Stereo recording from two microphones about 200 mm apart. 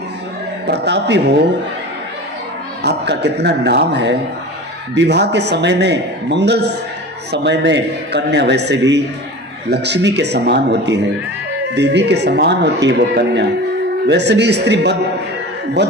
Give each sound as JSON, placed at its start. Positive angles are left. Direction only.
{"t": 0.7, "sound": "a man's voice", "side_deg": -60}
{"t": 2.8, "sound": "a man's voice", "side_deg": -55}